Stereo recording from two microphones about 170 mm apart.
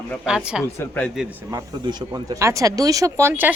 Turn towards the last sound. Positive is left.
turn(degrees=-15)  # may be behind; listen again after turning